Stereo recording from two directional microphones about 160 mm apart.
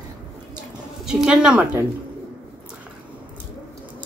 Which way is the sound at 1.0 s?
5° right (ahead or behind).